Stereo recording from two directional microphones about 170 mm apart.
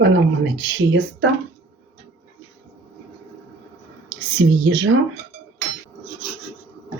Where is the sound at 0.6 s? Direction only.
90° right.